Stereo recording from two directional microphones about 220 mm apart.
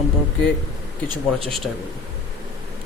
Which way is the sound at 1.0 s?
25° right (ahead or behind).